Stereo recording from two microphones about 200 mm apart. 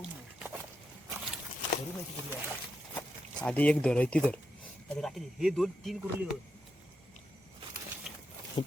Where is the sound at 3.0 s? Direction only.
5° left (ahead or behind).